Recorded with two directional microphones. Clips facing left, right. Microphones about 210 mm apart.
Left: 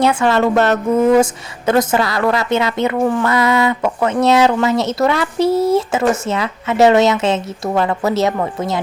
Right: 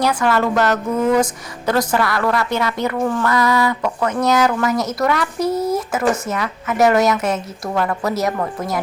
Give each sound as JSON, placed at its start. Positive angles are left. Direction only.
{"t": 0.0, "sound": "a woman's voice", "side_deg": 25}